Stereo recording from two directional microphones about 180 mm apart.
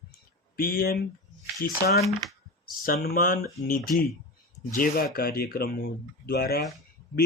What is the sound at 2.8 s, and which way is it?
Speech, 55° left (ahead or behind).